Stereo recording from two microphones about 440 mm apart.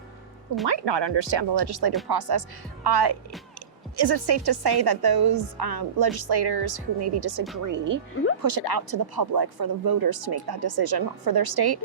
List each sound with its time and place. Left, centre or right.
0.7 s a woman's voice: right
8.1 s speech: left
8.4 s a woman's voice: right